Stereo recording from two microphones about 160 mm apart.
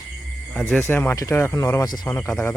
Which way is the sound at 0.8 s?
15° left (ahead or behind).